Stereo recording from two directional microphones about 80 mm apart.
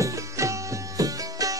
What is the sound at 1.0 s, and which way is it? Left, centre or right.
Music, right.